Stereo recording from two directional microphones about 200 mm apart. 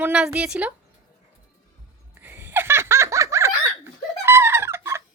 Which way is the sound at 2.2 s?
10° right (ahead or behind).